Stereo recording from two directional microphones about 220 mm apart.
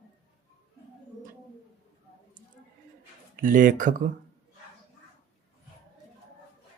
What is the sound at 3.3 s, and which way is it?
Speech, 40° right (ahead or behind).